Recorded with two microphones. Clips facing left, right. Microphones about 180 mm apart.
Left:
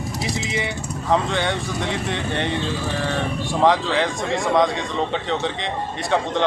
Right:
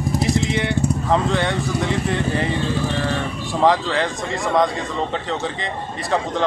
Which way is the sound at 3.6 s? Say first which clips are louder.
Right 1 dB; centre (ahead or behind).